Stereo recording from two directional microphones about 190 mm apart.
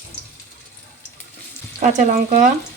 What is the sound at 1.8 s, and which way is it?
Frying, 40° right (ahead or behind).